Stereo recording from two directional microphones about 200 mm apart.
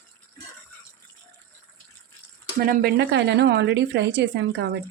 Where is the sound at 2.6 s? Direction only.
55° right (ahead or behind).